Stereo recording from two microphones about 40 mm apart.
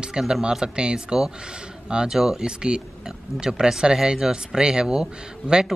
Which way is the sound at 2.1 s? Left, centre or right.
Centre.